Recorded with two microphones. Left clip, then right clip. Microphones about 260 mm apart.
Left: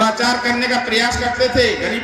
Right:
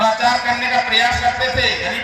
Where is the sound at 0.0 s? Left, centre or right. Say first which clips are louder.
Right 1 dB; left.